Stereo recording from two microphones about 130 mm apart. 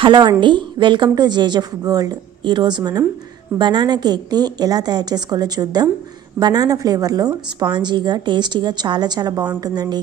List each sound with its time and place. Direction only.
0.0 s a woman's voice: 35° right (ahead or behind)